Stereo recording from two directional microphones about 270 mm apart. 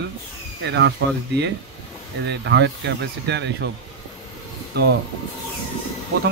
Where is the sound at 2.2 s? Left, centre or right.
Right.